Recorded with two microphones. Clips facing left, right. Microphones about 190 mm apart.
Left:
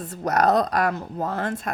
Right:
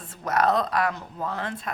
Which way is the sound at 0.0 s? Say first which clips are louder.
Left 3 dB; 40° left (ahead or behind).